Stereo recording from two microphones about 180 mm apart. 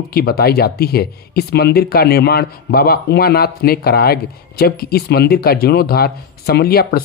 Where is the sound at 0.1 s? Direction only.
60° left (ahead or behind).